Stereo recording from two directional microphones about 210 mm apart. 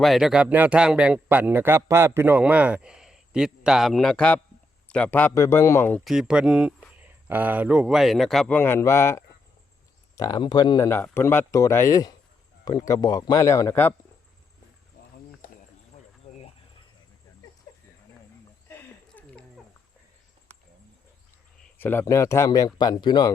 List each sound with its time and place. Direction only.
0.0 s a man's voice: centre (ahead or behind)
6.1 s a man's voice: 5° right (ahead or behind)
18.7 s a sound: 5° left (ahead or behind)
21.8 s speech: 10° left (ahead or behind)